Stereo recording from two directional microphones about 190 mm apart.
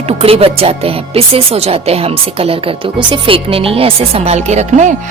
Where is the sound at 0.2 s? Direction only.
30° right (ahead or behind).